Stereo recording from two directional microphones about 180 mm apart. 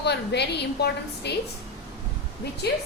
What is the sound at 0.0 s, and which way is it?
A woman's voice, 70° left (ahead or behind).